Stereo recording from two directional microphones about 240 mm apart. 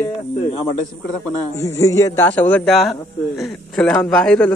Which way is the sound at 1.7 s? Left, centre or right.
Centre.